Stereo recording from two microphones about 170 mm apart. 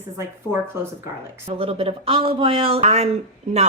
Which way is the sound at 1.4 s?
35° right (ahead or behind).